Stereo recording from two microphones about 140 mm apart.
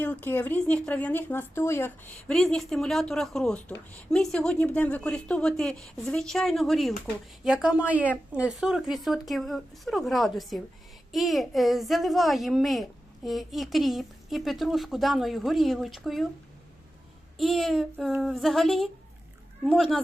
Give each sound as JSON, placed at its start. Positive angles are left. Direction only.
{"t": 0.0, "sound": "speech", "side_deg": 15}
{"t": 2.3, "sound": "a woman's voice", "side_deg": 5}
{"t": 17.3, "sound": "a woman's voice", "side_deg": 0}